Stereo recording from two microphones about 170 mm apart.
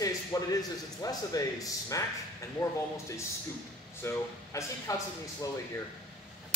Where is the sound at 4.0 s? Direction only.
15° left (ahead or behind).